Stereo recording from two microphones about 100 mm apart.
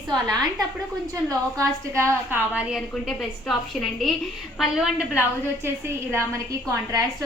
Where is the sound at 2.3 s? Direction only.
15° right (ahead or behind).